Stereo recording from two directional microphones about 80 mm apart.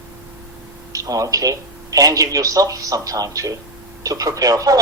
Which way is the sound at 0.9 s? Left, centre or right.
Right.